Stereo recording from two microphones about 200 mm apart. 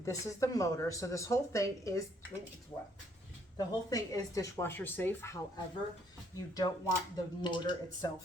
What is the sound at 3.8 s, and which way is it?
Speech, 15° left (ahead or behind).